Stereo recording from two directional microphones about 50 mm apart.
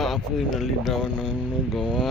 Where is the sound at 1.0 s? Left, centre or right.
Centre.